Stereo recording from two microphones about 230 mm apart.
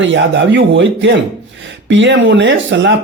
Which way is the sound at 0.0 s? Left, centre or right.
Right.